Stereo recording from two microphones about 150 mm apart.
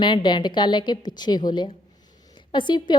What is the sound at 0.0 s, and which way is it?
A woman's voice, 30° left (ahead or behind).